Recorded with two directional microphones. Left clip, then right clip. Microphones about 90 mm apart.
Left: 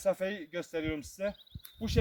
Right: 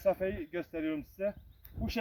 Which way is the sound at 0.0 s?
40° left (ahead or behind).